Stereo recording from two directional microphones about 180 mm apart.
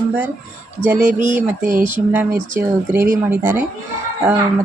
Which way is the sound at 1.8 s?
10° right (ahead or behind).